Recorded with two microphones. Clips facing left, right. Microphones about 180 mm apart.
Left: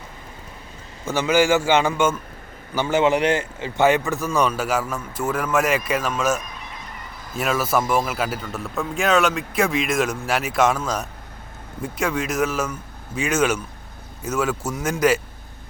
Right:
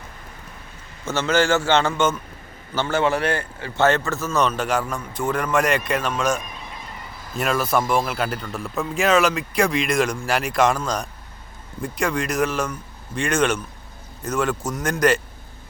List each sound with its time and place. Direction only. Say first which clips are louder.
1.0 s a man's voice: left 2 dB; 10° left (ahead or behind)